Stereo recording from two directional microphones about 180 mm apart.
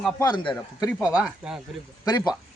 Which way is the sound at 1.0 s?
5° right (ahead or behind).